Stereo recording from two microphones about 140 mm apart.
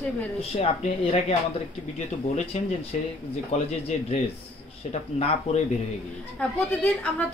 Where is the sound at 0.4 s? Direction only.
45° left (ahead or behind).